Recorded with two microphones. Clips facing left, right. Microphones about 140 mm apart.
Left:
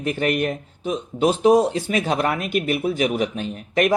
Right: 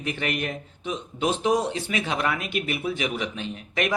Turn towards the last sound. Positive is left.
turn(degrees=45)  # may be behind; listen again after turning